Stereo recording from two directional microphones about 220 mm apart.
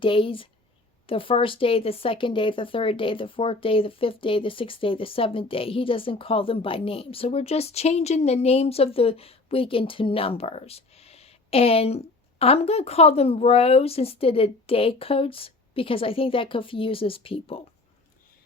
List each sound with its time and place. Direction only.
0.0 s speech: 25° left (ahead or behind)